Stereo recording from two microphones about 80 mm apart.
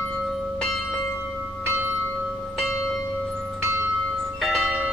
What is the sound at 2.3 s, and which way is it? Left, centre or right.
Church bell, centre.